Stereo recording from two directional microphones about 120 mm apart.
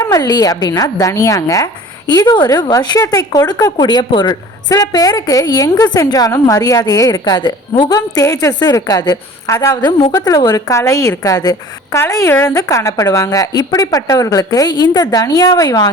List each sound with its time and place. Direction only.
0.0 s a woman's voice: 30° left (ahead or behind)